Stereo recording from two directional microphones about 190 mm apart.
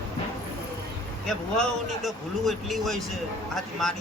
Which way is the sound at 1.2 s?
Centre (ahead or behind).